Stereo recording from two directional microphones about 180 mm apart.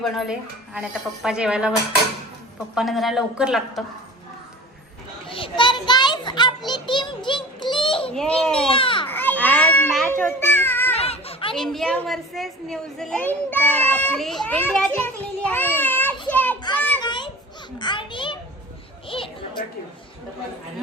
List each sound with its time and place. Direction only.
0.0 s a woman's voice: centre (ahead or behind)
2.7 s a woman's voice: centre (ahead or behind)
5.3 s children playing: 30° left (ahead or behind)
6.7 s child singing: 25° left (ahead or behind)
8.1 s a woman's voice: 5° left (ahead or behind)
8.7 s children playing: 30° left (ahead or behind)
9.0 s children playing: 10° left (ahead or behind)
10.1 s a sound: 10° left (ahead or behind)
10.9 s a sound: 35° left (ahead or behind)
11.5 s a woman's voice: centre (ahead or behind)
15.8 s children playing: 10° left (ahead or behind)
17.0 s children playing: 25° left (ahead or behind)
17.7 s a sound: 25° left (ahead or behind)
19.0 s music: 30° left (ahead or behind)